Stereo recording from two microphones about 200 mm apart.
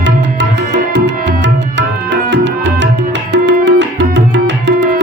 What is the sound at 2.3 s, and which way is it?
Tabla, 60° right (ahead or behind).